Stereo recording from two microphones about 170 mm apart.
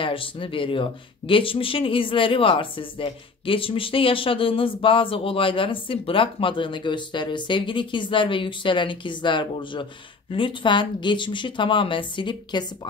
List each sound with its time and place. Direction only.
0.0 s speech: 30° left (ahead or behind)